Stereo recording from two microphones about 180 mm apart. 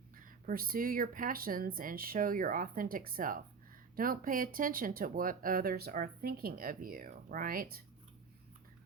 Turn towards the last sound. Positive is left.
turn(degrees=-55)  # may be behind; listen again after turning